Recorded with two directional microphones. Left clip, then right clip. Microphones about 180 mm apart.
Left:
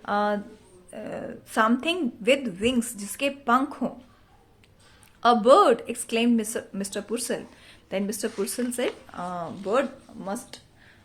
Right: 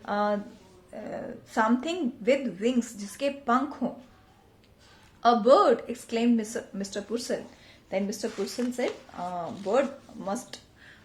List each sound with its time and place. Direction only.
0.0 s a woman's voice: 25° left (ahead or behind)
5.2 s a woman's voice: 30° left (ahead or behind)